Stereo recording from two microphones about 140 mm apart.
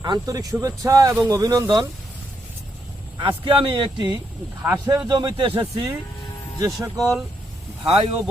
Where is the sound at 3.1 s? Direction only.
35° right (ahead or behind).